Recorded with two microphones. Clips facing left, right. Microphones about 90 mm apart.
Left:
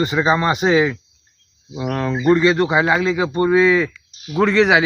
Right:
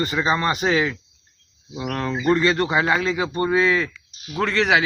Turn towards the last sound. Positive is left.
turn(degrees=15)  # may be behind; listen again after turning